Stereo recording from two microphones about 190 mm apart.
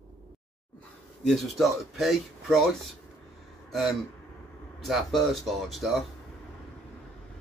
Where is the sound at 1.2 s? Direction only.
Centre (ahead or behind).